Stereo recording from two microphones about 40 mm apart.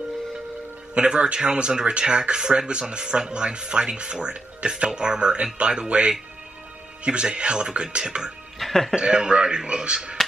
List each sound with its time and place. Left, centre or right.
0.9 s speech: right
8.5 s music: centre
8.9 s speech: centre